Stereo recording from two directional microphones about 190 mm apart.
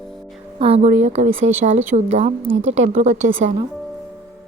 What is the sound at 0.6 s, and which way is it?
Speech, 35° right (ahead or behind).